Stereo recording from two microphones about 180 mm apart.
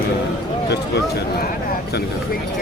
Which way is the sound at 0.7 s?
70° left (ahead or behind).